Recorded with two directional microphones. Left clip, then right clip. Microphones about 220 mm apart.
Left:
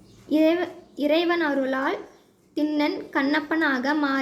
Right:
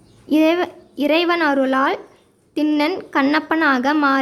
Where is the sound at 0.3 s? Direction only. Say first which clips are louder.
Right 5 dB; 30° right (ahead or behind).